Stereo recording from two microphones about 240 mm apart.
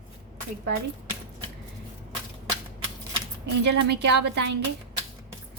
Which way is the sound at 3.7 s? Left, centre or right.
Right.